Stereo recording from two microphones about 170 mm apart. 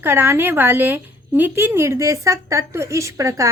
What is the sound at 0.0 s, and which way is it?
A woman's voice, 15° right (ahead or behind).